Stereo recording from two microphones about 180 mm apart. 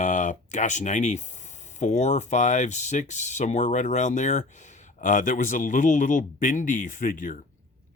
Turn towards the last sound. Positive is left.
turn(degrees=50)  # may be behind; listen again after turning